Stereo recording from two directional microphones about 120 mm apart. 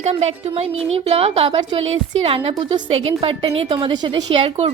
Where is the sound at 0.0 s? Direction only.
65° right (ahead or behind).